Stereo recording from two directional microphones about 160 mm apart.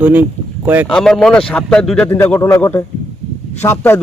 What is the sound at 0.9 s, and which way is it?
A man's voice, 5° left (ahead or behind).